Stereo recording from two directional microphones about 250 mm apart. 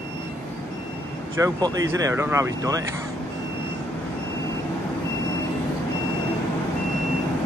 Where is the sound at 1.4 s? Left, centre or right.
Centre.